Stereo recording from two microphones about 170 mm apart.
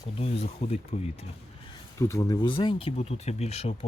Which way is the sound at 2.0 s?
20° left (ahead or behind).